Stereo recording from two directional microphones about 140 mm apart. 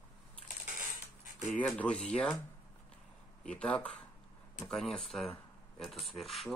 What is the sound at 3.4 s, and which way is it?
Speech, 10° left (ahead or behind).